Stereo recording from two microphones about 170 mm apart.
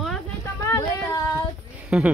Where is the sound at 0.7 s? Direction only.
20° left (ahead or behind).